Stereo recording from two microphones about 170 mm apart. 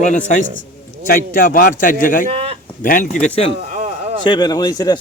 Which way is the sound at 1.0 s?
55° left (ahead or behind).